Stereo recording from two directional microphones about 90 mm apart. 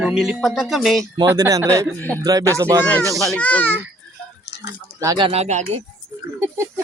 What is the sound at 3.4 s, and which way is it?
Speech, 15° left (ahead or behind).